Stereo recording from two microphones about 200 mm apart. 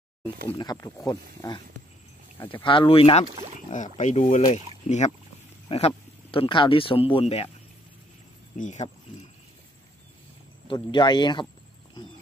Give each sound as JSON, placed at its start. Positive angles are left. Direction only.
{"t": 0.5, "sound": "speech", "side_deg": 20}
{"t": 2.5, "sound": "speech", "side_deg": 25}
{"t": 3.3, "sound": "speech", "side_deg": -30}
{"t": 3.7, "sound": "speech", "side_deg": 40}
{"t": 8.5, "sound": "speech", "side_deg": 35}
{"t": 10.7, "sound": "speech", "side_deg": 25}